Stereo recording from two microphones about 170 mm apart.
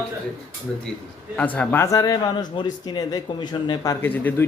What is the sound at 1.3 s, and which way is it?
Speech, 10° left (ahead or behind).